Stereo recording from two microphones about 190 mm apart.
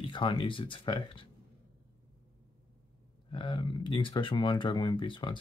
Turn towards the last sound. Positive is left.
turn(degrees=25)  # may be behind; listen again after turning